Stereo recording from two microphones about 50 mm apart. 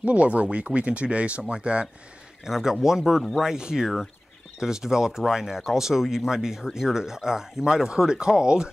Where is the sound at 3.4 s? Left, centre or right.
Centre.